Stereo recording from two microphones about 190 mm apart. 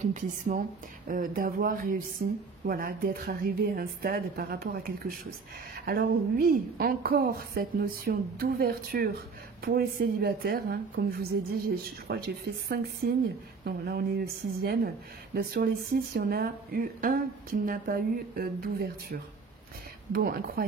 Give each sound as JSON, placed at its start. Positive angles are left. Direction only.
{"t": 0.1, "sound": "speech", "side_deg": -45}
{"t": 20.1, "sound": "speech", "side_deg": -50}